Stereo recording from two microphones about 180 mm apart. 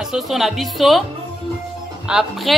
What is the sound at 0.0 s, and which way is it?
A woman's voice, centre (ahead or behind).